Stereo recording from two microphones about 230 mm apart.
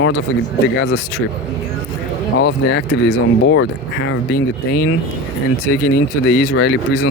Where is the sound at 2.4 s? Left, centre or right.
Left.